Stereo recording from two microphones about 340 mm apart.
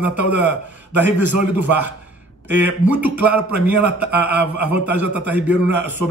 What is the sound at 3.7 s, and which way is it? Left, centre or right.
Speech, left.